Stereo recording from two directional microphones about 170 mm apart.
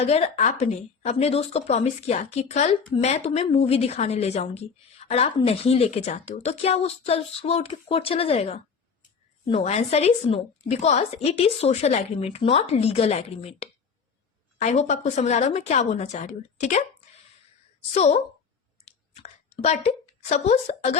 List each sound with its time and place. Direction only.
0.0 s a woman's voice: 40° left (ahead or behind)
17.9 s a woman's voice: 40° left (ahead or behind)
18.9 s clicking: 40° left (ahead or behind)
20.3 s a woman's voice: 40° left (ahead or behind)